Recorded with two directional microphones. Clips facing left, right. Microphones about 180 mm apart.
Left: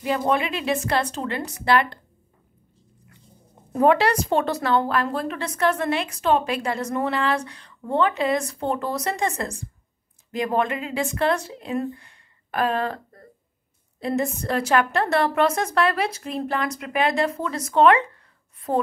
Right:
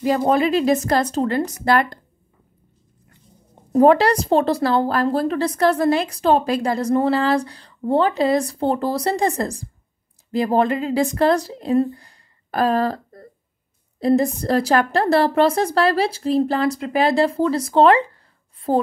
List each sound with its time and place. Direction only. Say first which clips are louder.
0.0 s a woman's voice: right 5 dB; 35° right (ahead or behind)
3.7 s a woman's voice: right 5 dB; 35° right (ahead or behind)